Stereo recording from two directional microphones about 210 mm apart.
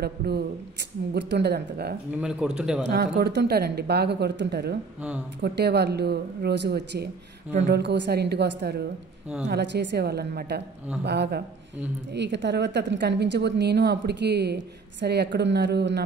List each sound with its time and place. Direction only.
0.0 s a woman's voice: 50° right (ahead or behind)
2.1 s a man's voice: 5° right (ahead or behind)
2.9 s a woman's voice: 50° right (ahead or behind)